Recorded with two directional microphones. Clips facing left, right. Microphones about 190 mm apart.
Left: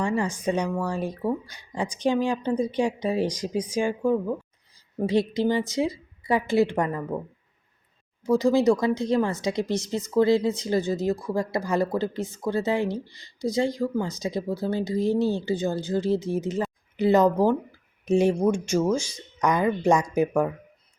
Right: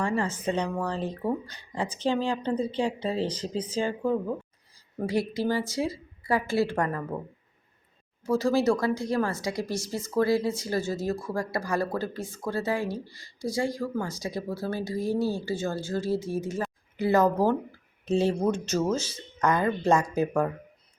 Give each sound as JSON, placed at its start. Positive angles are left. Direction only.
{"t": 0.0, "sound": "speech", "side_deg": 15}
{"t": 8.2, "sound": "speech", "side_deg": 15}